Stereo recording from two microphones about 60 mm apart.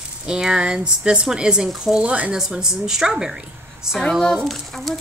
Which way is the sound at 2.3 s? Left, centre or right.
Centre.